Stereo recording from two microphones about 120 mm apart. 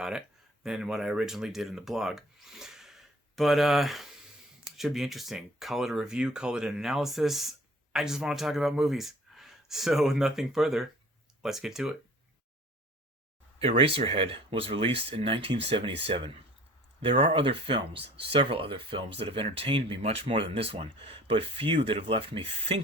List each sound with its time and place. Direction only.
0.6 s speech: 5° right (ahead or behind)
13.6 s speech: 50° right (ahead or behind)